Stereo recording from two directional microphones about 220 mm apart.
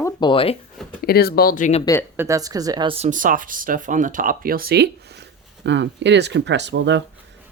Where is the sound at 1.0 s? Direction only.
45° left (ahead or behind).